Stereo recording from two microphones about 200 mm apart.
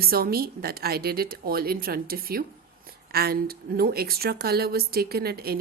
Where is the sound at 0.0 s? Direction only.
50° right (ahead or behind).